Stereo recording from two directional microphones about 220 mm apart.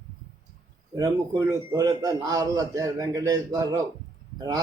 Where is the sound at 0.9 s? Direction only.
15° right (ahead or behind).